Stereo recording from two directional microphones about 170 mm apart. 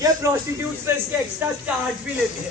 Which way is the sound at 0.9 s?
15° right (ahead or behind).